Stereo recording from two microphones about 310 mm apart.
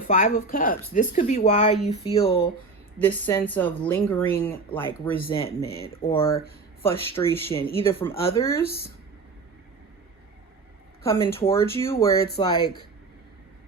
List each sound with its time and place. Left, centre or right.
0.1 s speech: left
3.0 s a woman's voice: centre
5.3 s speech: centre
11.0 s speech: centre